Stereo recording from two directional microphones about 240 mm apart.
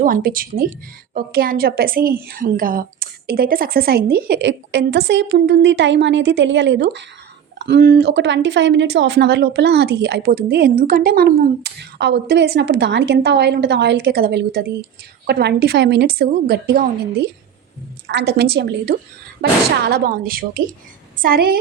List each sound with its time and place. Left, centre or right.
0.0 s a woman's voice: right